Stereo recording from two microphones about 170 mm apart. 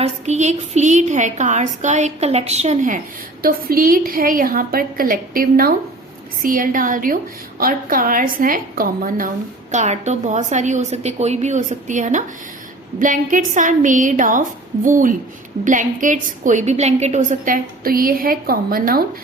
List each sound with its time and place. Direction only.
0.0 s a woman's voice: 40° right (ahead or behind)
3.4 s a woman's voice: 60° right (ahead or behind)
9.7 s a woman's voice: 45° right (ahead or behind); by 19.0 s 60° right (ahead or behind)